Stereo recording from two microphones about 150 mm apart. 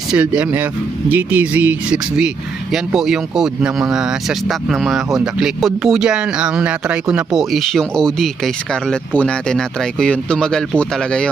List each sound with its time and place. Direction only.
0.1 s speech: 10° right (ahead or behind)